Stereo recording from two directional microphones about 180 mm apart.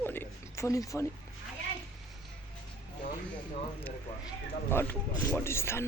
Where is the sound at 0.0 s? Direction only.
10° left (ahead or behind).